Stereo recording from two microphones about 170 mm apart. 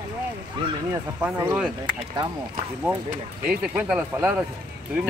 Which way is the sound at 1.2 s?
20° right (ahead or behind).